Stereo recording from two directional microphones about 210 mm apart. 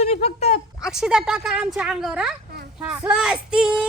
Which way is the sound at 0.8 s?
5° right (ahead or behind).